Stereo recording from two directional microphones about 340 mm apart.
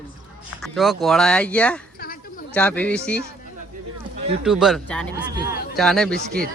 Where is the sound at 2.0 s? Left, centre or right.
Left.